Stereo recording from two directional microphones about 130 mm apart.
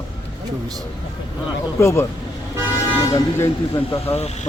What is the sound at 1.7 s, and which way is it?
Speech, 20° left (ahead or behind).